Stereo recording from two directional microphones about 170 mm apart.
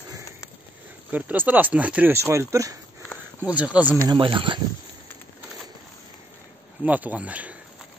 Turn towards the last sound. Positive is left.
turn(degrees=-10)  # may be behind; listen again after turning